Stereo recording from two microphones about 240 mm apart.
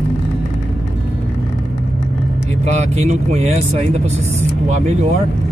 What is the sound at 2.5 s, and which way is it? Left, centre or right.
Speech, right.